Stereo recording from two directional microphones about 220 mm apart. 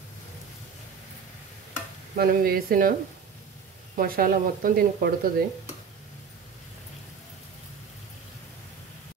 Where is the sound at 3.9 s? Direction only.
40° right (ahead or behind).